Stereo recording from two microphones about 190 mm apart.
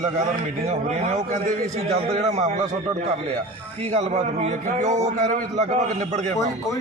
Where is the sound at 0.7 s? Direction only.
40° right (ahead or behind).